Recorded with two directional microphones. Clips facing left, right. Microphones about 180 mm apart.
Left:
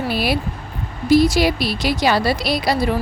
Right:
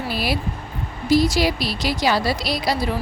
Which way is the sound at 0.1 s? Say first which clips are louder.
Left 3 dB; 60° left (ahead or behind).